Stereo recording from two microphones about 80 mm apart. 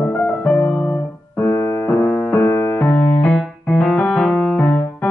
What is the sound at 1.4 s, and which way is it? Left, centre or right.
Piano, left.